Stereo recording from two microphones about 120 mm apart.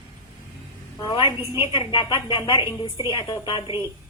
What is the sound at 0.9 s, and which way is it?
A woman's voice, 35° left (ahead or behind).